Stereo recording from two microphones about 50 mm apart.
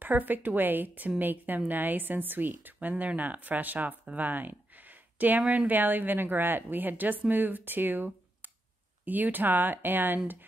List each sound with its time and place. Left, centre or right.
0.0 s a woman's voice: right
4.0 s a sound: right
5.7 s a woman's voice: right